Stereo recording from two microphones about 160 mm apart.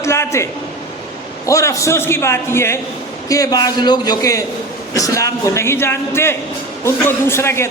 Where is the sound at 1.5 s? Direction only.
20° left (ahead or behind).